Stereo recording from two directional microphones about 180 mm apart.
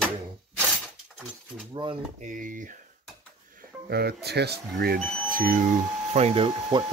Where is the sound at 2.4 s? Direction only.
50° right (ahead or behind).